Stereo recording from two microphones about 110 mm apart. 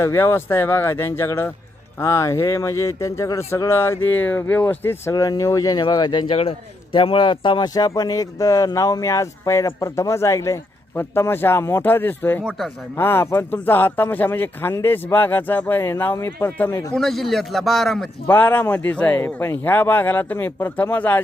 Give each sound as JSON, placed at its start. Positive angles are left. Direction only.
{"t": 0.0, "sound": "a man's voice", "side_deg": 25}
{"t": 5.1, "sound": "speech", "side_deg": 30}
{"t": 6.3, "sound": "a man's voice", "side_deg": 60}
{"t": 16.9, "sound": "a man's voice", "side_deg": 5}
{"t": 18.3, "sound": "speech", "side_deg": 15}